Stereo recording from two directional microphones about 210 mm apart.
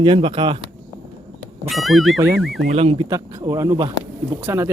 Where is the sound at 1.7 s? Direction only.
Centre (ahead or behind).